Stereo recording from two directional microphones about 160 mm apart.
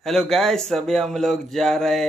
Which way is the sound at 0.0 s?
Centre (ahead or behind).